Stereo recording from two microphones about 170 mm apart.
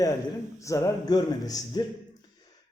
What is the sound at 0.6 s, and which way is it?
A man's voice, 20° left (ahead or behind).